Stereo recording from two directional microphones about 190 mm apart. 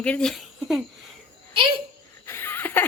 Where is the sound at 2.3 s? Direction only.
10° left (ahead or behind).